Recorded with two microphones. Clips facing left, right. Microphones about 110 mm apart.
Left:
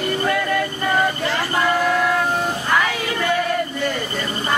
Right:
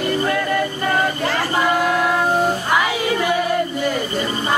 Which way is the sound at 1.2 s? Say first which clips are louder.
Right 2 dB; 50° right (ahead or behind).